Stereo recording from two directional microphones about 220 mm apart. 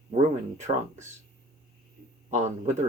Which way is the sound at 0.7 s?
25° right (ahead or behind).